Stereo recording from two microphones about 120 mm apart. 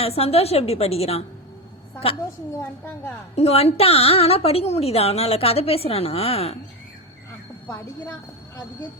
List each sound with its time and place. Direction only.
0.0 s a woman's voice: 55° left (ahead or behind)
3.3 s a woman's voice: 60° left (ahead or behind)